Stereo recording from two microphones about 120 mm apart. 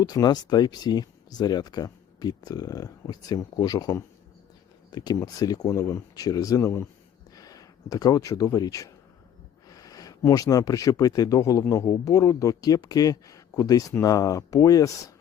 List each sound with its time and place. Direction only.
0.0 s speech: 35° left (ahead or behind)